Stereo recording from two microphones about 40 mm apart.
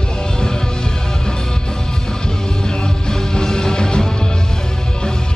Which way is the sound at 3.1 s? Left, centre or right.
Centre.